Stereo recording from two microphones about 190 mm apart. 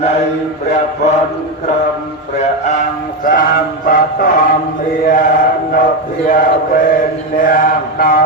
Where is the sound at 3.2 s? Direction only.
45° left (ahead or behind).